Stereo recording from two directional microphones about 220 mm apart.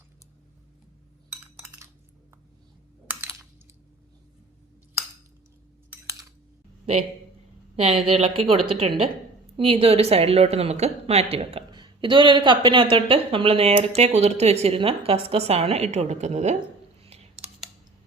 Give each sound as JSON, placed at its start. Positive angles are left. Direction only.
{"t": 3.1, "sound": "computer keyboard", "side_deg": -10}
{"t": 7.8, "sound": "a woman's voice", "side_deg": -25}
{"t": 17.0, "sound": "clicking", "side_deg": -30}